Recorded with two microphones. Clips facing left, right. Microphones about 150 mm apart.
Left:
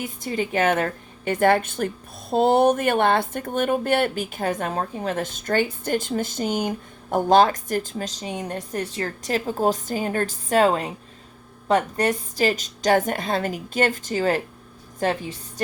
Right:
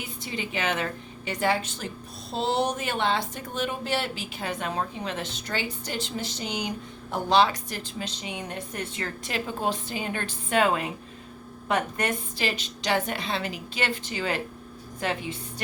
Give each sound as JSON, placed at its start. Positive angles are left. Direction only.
{"t": 0.0, "sound": "a woman's voice", "side_deg": 45}